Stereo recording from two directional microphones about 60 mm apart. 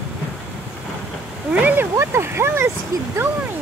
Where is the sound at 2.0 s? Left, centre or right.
Right.